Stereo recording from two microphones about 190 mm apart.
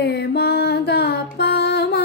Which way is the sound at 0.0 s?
60° left (ahead or behind).